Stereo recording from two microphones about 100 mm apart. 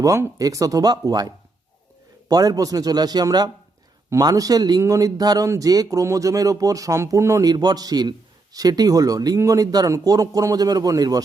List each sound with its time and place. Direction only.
0.0 s speech: 35° right (ahead or behind)
2.3 s speech: 35° right (ahead or behind)
7.5 s a man's voice: 45° right (ahead or behind)